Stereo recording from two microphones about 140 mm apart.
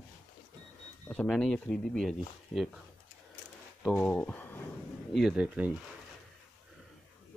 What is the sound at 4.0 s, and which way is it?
Speech, 10° left (ahead or behind).